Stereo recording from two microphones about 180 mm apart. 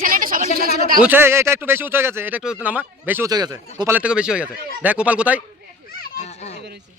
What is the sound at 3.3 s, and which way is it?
Speech, 20° right (ahead or behind).